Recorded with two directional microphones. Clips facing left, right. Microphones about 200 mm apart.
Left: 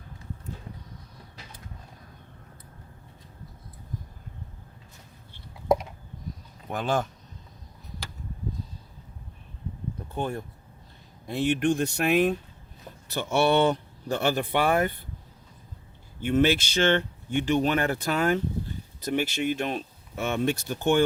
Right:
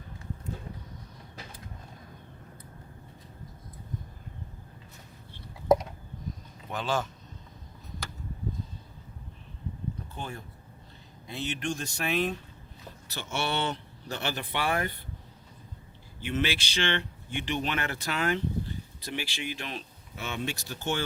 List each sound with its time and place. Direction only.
6.7 s speech: 55° left (ahead or behind)
11.3 s speech: 55° left (ahead or behind)
16.2 s speech: 50° left (ahead or behind)